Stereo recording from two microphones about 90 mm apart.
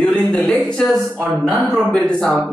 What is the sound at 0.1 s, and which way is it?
Speech, 10° left (ahead or behind).